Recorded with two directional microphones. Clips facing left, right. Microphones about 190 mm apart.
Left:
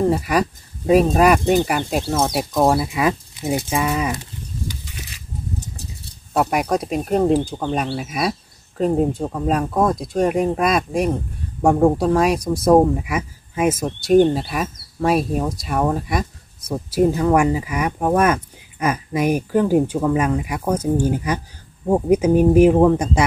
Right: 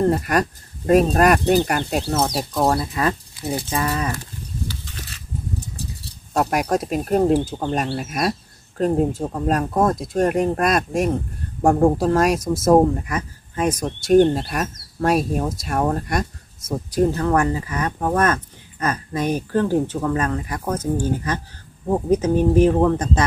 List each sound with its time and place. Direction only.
0.0 s speech: centre (ahead or behind)
6.3 s speech: centre (ahead or behind)